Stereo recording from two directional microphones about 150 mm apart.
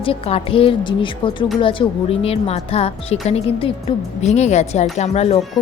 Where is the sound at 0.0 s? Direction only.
40° left (ahead or behind).